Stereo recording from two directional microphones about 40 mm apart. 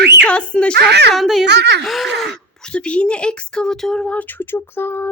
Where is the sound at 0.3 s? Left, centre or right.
Left.